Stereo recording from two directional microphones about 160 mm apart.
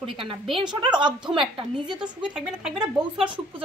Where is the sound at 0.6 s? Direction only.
30° right (ahead or behind).